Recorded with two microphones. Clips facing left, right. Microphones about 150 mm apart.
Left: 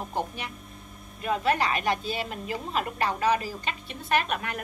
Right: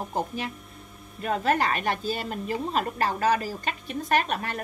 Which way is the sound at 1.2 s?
40° right (ahead or behind).